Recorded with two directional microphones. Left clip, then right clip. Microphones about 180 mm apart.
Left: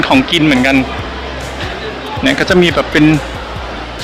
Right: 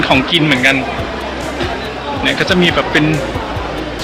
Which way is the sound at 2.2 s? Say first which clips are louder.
Left 3 dB; 15° left (ahead or behind).